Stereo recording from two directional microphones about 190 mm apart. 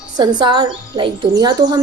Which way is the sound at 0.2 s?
25° right (ahead or behind).